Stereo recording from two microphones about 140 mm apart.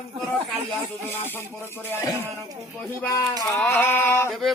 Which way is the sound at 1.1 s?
15° left (ahead or behind).